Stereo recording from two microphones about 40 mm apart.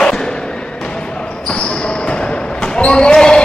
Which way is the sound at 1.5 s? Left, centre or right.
Left.